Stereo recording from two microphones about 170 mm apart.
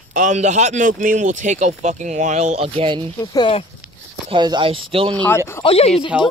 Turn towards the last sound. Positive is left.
turn(degrees=35)  # may be behind; listen again after turning